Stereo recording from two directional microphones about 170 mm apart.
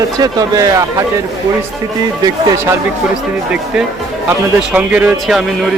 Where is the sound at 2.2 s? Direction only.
25° right (ahead or behind).